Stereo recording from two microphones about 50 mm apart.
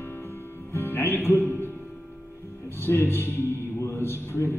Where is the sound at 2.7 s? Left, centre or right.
Left.